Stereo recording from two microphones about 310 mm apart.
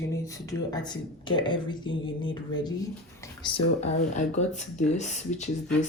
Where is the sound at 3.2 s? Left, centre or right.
Centre.